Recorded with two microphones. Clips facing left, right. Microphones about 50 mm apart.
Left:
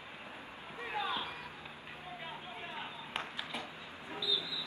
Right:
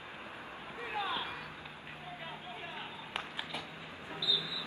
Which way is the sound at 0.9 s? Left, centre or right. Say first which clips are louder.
Even; centre.